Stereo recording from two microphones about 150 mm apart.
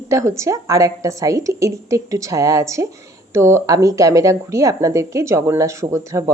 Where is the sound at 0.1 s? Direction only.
20° right (ahead or behind).